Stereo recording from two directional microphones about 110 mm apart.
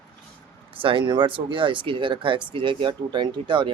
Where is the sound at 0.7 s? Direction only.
55° right (ahead or behind).